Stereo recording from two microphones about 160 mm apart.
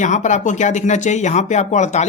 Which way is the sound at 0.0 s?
50° left (ahead or behind).